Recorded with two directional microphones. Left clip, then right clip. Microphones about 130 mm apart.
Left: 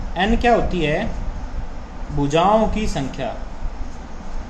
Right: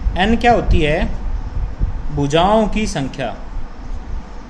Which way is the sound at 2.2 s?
60° right (ahead or behind).